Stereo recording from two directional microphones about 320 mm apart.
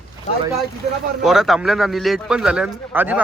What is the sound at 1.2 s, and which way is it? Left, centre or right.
Speech, centre.